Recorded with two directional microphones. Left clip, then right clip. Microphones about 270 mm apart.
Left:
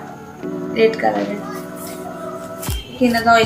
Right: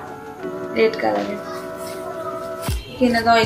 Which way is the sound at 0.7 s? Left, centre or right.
Centre.